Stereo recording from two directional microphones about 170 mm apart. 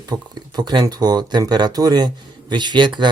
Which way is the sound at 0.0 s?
20° right (ahead or behind).